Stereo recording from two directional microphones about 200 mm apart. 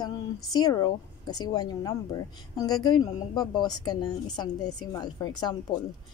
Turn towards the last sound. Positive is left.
turn(degrees=20)  # may be behind; listen again after turning